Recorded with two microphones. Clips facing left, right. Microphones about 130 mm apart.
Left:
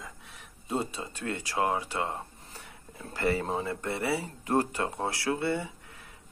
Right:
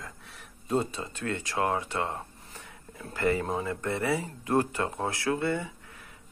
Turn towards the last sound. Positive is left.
turn(degrees=30)  # may be behind; listen again after turning